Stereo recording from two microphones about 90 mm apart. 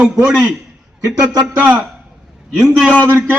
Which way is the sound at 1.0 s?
45° right (ahead or behind).